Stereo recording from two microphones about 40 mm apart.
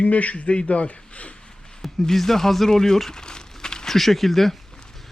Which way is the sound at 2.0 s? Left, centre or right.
Centre.